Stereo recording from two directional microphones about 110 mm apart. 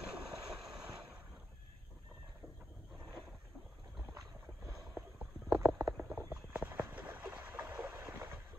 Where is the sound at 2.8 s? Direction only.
Centre (ahead or behind).